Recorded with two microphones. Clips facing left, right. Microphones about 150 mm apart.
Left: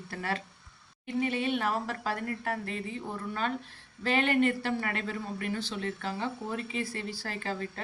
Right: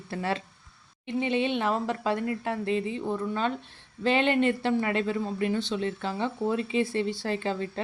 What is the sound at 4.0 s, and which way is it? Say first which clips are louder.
Speech: right 3 dB; 25° right (ahead or behind).